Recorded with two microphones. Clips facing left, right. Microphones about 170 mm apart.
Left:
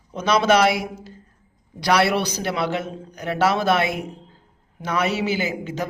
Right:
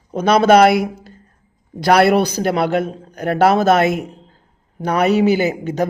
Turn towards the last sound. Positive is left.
turn(degrees=-40)  # may be behind; listen again after turning